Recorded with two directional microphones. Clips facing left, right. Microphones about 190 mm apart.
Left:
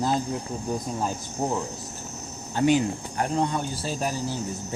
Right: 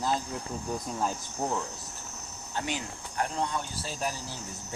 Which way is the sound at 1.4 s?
20° left (ahead or behind).